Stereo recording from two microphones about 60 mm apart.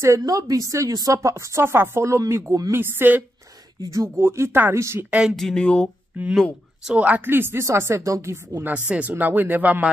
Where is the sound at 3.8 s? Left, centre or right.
Right.